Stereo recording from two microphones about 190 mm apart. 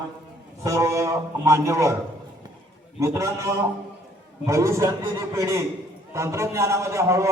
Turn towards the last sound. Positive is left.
turn(degrees=-15)  # may be behind; listen again after turning